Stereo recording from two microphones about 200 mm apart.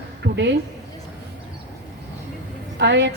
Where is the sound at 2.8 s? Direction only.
60° right (ahead or behind).